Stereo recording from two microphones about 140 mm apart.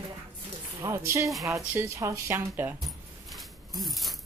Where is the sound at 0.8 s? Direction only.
20° right (ahead or behind).